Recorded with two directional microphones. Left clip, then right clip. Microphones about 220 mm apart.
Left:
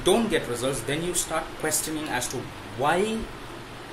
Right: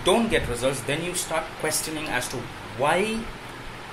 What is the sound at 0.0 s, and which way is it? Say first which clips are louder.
Speech: right 1 dB; 15° left (ahead or behind).